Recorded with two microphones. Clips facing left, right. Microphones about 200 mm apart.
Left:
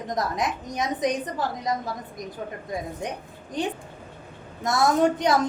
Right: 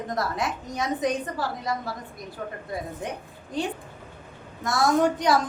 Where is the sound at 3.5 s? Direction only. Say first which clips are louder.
Left 1 dB; 20° left (ahead or behind).